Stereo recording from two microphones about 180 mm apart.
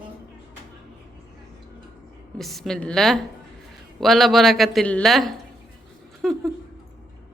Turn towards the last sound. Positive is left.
turn(degrees=0)  # may be behind; listen again after turning